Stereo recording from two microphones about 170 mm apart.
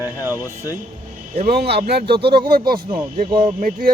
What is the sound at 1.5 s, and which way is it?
Speech, 70° right (ahead or behind).